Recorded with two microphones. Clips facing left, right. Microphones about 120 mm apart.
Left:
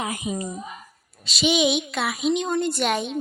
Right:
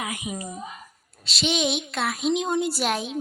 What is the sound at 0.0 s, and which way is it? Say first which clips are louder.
Speech: left 4 dB; 30° left (ahead or behind).